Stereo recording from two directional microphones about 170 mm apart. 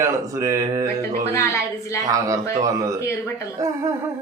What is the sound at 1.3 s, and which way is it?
Speech, 15° left (ahead or behind).